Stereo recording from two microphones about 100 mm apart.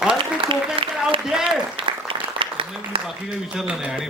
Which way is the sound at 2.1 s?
60° right (ahead or behind).